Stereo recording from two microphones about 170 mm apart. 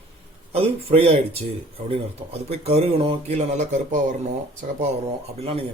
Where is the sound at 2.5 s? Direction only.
35° right (ahead or behind).